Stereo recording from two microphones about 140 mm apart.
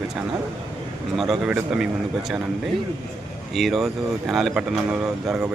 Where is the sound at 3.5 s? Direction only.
Centre (ahead or behind).